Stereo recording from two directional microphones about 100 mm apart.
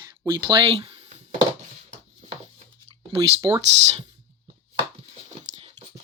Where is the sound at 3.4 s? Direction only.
40° right (ahead or behind).